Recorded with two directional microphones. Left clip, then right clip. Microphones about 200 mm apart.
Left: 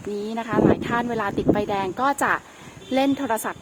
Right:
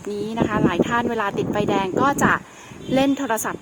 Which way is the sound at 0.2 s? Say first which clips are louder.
Right 1 dB; 10° right (ahead or behind).